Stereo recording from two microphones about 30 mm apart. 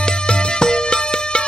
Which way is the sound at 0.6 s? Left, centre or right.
Left.